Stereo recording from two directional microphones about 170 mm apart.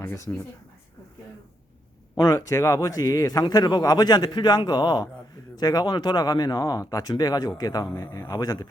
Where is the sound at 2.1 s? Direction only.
20° left (ahead or behind).